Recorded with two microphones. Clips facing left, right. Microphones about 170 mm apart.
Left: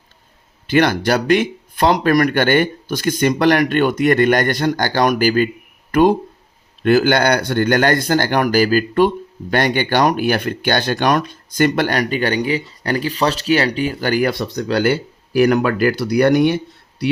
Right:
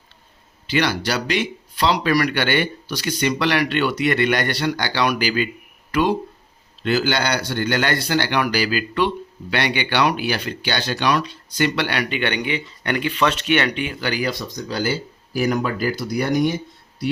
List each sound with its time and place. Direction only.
0.7 s speech: 50° left (ahead or behind); by 17.2 s 75° left (ahead or behind)